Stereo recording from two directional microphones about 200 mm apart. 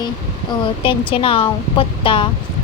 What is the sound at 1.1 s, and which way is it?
A woman's voice, 25° left (ahead or behind).